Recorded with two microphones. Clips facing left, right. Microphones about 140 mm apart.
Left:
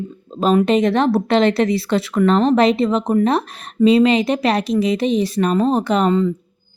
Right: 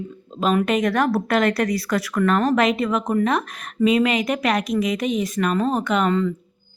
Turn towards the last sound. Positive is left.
turn(degrees=35)  # may be behind; listen again after turning